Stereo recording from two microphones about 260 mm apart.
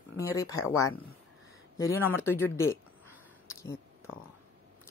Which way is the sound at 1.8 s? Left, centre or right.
Centre.